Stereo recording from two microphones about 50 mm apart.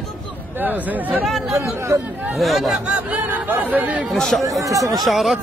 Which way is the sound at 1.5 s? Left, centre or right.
Right.